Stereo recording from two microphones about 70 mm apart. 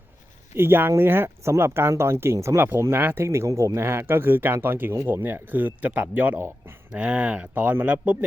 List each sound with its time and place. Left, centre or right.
0.5 s speech: right
2.6 s speech: right
3.2 s speech: right
3.8 s speech: right
5.2 s speech: right